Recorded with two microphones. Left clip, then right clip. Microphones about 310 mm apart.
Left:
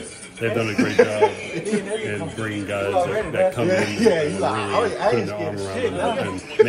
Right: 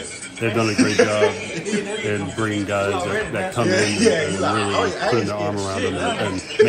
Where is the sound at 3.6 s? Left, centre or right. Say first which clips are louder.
Right 1 dB; left.